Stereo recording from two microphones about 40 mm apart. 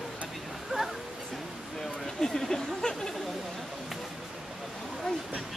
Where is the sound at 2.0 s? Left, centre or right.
Centre.